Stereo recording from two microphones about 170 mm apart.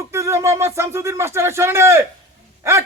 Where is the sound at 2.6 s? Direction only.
15° right (ahead or behind).